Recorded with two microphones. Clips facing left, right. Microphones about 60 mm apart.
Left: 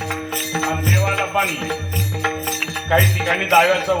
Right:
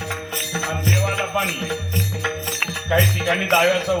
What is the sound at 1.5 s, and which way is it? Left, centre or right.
Music, left.